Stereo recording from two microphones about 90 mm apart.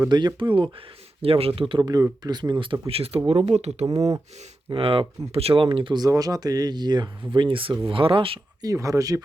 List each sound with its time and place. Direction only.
0.1 s speech: 55° right (ahead or behind)
1.2 s speech: 90° right
1.8 s speech: 40° right (ahead or behind)
2.2 s speech: 50° right (ahead or behind)
2.8 s speech: 90° right
3.8 s speech: 40° right (ahead or behind)
4.7 s speech: 85° right; by 6.0 s 70° right (ahead or behind)
6.0 s speech: 45° right (ahead or behind); by 8.4 s 80° right
8.6 s speech: 35° right (ahead or behind)